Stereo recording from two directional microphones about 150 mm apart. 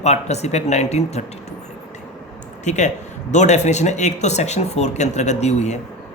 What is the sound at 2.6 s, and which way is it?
A man's voice, 50° left (ahead or behind).